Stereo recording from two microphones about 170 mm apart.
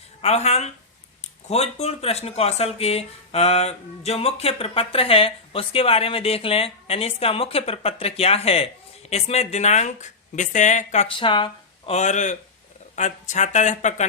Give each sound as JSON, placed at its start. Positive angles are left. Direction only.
{"t": 0.2, "sound": "speech", "side_deg": 40}
{"t": 11.9, "sound": "speech", "side_deg": 45}